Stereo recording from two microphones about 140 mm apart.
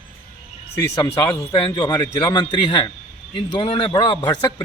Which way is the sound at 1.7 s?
30° left (ahead or behind).